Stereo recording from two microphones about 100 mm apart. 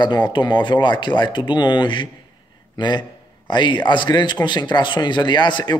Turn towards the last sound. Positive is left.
turn(degrees=50)  # may be behind; listen again after turning